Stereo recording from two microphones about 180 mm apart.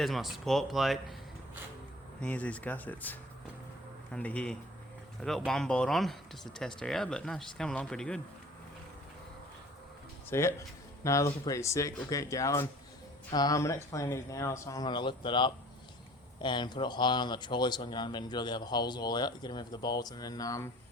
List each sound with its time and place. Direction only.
0.0 s speech: centre (ahead or behind)
2.2 s speech: 10° left (ahead or behind)
10.2 s speech: 15° left (ahead or behind)